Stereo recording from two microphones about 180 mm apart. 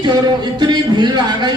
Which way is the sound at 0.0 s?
25° right (ahead or behind).